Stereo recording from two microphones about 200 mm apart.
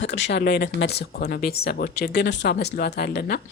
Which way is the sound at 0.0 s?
60° left (ahead or behind).